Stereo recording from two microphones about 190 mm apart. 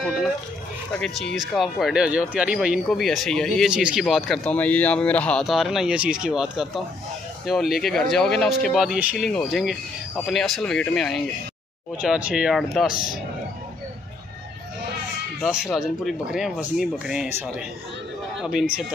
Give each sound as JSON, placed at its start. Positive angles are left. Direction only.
{"t": 0.9, "sound": "speech", "side_deg": 5}
{"t": 12.9, "sound": "a man's voice", "side_deg": 50}
{"t": 15.4, "sound": "speech", "side_deg": -5}